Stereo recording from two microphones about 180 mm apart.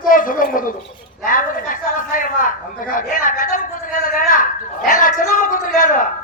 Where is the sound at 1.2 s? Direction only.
50° left (ahead or behind).